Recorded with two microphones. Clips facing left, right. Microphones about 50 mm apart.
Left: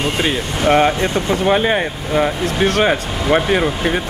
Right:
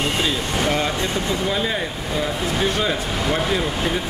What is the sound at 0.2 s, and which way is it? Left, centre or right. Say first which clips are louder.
Speech: left 4 dB; left.